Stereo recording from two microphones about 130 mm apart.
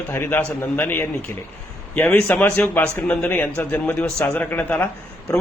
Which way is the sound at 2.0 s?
20° left (ahead or behind).